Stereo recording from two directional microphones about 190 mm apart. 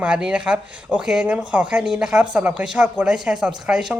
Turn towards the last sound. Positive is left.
turn(degrees=-5)  # may be behind; listen again after turning